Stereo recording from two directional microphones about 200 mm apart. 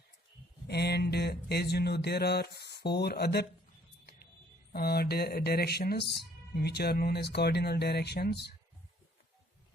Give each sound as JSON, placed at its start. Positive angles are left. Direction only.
{"t": 0.7, "sound": "speech", "side_deg": 55}
{"t": 4.7, "sound": "speech", "side_deg": 50}